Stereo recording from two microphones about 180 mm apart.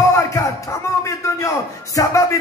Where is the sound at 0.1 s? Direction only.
15° left (ahead or behind).